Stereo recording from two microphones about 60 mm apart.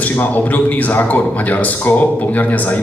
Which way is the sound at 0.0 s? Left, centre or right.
Left.